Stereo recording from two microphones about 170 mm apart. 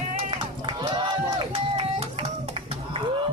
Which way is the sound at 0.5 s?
30° right (ahead or behind).